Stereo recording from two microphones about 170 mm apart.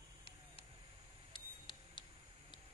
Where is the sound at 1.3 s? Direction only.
30° left (ahead or behind).